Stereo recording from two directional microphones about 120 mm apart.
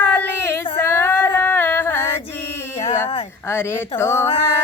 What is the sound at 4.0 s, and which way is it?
Music, 20° left (ahead or behind).